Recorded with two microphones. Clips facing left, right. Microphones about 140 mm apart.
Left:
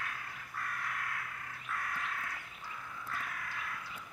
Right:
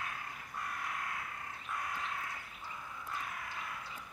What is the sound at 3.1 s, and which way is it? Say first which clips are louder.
Crow: even; 20° right (ahead or behind).